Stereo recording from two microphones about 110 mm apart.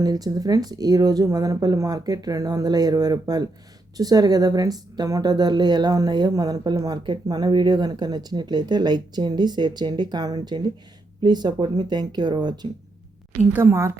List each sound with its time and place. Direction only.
0.0 s speech: 35° right (ahead or behind)
13.5 s a woman's voice: 20° right (ahead or behind)